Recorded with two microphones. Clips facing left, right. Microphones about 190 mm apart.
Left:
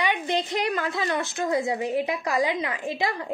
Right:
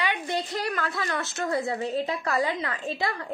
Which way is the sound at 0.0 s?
20° left (ahead or behind).